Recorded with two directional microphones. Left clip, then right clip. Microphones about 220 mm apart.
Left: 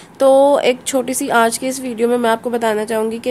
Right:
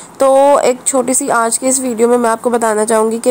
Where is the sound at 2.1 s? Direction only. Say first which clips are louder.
Right 4 dB; 10° right (ahead or behind).